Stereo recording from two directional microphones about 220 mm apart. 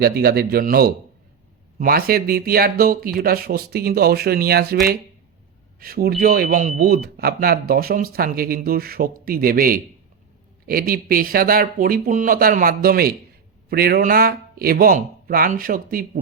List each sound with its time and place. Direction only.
0.0 s speech: 45° right (ahead or behind)